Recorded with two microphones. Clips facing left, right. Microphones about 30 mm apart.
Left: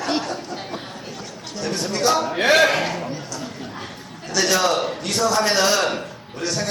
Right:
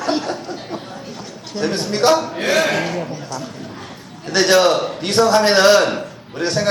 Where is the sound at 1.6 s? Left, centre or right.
Right.